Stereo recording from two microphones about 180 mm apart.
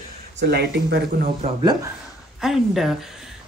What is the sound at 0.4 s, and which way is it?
Speech, 65° right (ahead or behind).